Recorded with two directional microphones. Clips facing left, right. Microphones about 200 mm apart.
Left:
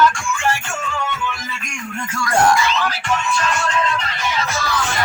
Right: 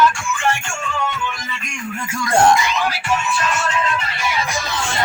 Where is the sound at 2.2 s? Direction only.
20° right (ahead or behind).